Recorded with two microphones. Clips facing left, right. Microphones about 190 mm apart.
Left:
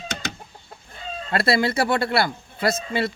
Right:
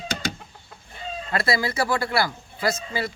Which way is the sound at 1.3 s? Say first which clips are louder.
Left 4 dB; 30° left (ahead or behind).